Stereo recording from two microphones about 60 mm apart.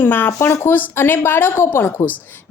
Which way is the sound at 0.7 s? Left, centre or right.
Left.